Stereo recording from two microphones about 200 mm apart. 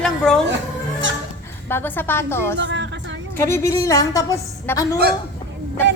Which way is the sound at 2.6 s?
65° right (ahead or behind).